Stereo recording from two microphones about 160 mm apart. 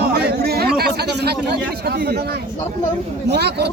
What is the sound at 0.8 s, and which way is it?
A man's voice, 90° right.